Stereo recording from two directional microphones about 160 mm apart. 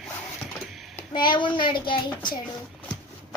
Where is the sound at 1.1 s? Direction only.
30° left (ahead or behind).